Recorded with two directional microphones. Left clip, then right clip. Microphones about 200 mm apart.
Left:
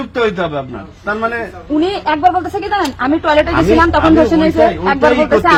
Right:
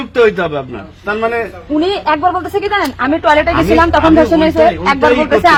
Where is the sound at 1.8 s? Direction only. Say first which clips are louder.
Even; 40° right (ahead or behind).